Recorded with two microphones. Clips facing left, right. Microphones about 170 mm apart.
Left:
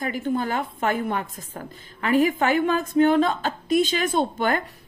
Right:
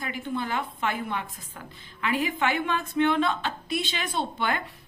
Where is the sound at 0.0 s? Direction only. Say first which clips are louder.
Left 6 dB; 45° left (ahead or behind).